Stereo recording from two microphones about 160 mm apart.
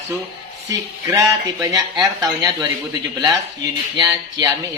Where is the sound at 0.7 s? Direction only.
20° right (ahead or behind).